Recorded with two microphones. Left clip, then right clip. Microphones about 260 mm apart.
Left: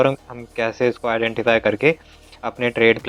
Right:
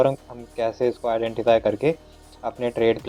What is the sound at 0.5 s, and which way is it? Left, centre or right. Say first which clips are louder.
Speech: left 3 dB; left.